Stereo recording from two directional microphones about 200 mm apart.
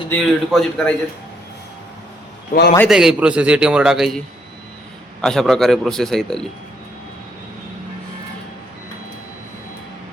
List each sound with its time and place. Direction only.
0.1 s a man's voice: 5° left (ahead or behind)
2.5 s a man's voice: 50° left (ahead or behind)
2.9 s a man's voice: centre (ahead or behind)
5.2 s a man's voice: centre (ahead or behind)